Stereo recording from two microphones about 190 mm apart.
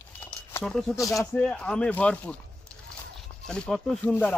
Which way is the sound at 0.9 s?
15° left (ahead or behind).